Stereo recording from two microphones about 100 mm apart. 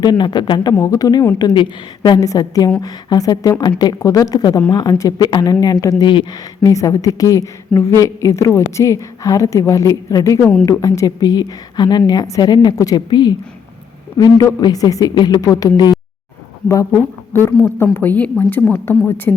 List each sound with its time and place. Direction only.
0.0 s speech: 45° left (ahead or behind)
0.7 s a woman's voice: 35° left (ahead or behind)
6.0 s speech: 55° left (ahead or behind)
6.6 s a woman's voice: 35° left (ahead or behind)
13.1 s a woman's voice: 50° left (ahead or behind)
17.3 s a woman's voice: 20° left (ahead or behind)